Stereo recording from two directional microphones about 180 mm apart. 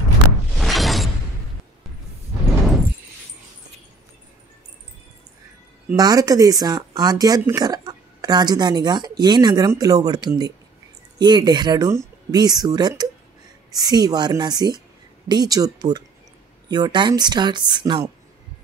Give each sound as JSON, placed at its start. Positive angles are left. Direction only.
{"t": 0.6, "sound": "shatter", "side_deg": 0}
{"t": 5.9, "sound": "speech", "side_deg": -20}